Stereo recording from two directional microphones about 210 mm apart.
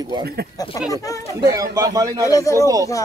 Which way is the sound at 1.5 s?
15° right (ahead or behind).